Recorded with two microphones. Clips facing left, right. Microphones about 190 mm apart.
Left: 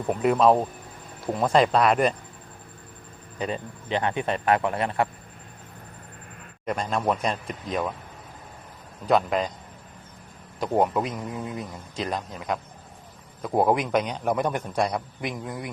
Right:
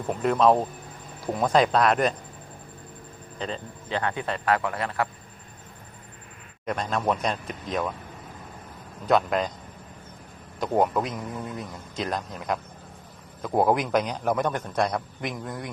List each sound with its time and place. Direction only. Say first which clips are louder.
0.1 s speech: left 1 dB; 5° left (ahead or behind)
3.3 s speech: left 3 dB; 15° left (ahead or behind)
6.7 s speech: left 1 dB; centre (ahead or behind)
9.0 s speech: even; centre (ahead or behind)
10.6 s speech: even; 5° left (ahead or behind)